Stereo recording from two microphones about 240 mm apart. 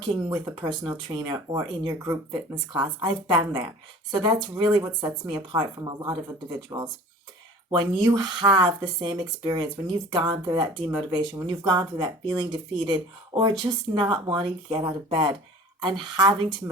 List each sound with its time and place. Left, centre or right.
0.0 s speech: centre